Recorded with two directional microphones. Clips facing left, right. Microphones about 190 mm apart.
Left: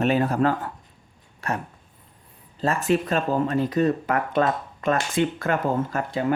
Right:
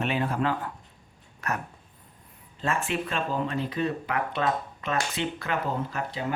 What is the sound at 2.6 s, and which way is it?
Speech, 40° left (ahead or behind).